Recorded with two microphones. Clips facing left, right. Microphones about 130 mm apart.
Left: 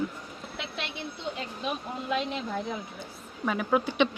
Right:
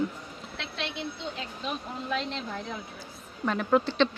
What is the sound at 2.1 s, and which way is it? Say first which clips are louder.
Speech: left 3 dB; 10° left (ahead or behind).